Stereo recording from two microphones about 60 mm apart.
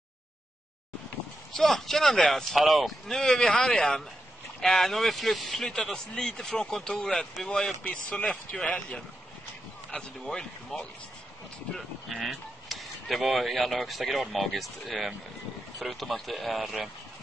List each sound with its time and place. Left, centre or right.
1.6 s speech: centre
3.2 s speech: centre
7.8 s speech: left
12.1 s speech: centre